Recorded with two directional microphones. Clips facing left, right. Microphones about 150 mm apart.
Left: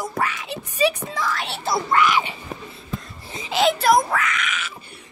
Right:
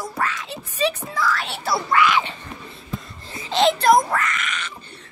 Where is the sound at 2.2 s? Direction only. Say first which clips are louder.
Even; 10° left (ahead or behind).